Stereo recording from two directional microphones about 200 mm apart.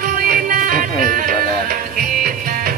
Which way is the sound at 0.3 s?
45° right (ahead or behind).